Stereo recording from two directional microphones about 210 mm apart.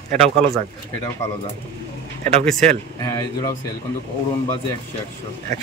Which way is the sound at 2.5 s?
5° left (ahead or behind).